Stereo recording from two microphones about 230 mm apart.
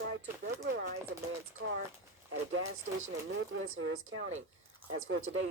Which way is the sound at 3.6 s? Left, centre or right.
Right.